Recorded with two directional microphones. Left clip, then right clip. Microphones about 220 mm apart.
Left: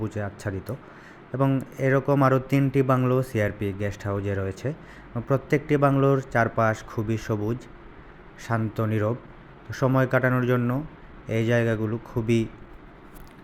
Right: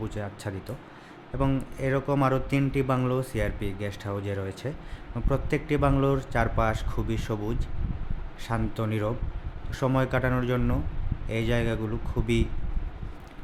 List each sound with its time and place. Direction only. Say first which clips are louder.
0.0 s a man's voice: left 3 dB; 10° left (ahead or behind)